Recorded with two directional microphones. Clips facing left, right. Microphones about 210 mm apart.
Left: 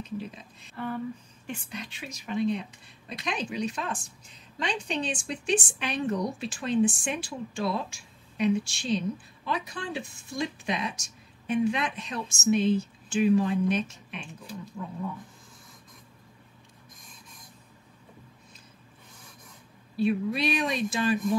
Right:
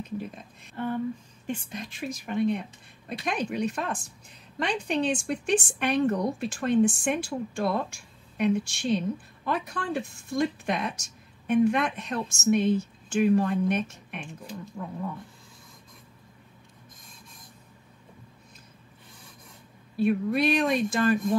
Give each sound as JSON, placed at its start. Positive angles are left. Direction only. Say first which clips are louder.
{"t": 0.0, "sound": "a woman's voice", "louder": "right 1 dB", "side_deg": -55}
{"t": 20.0, "sound": "a woman's voice", "louder": "right 2 dB", "side_deg": -50}